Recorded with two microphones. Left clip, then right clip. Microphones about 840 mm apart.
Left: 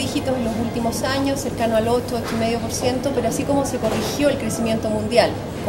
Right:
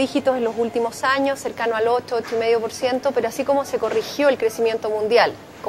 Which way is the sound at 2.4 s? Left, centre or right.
Right.